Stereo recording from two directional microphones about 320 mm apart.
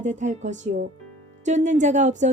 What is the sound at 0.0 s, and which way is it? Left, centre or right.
A woman's voice, right.